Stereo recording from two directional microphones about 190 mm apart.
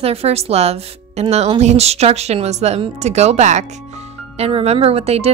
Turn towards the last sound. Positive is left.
turn(degrees=-35)  # may be behind; listen again after turning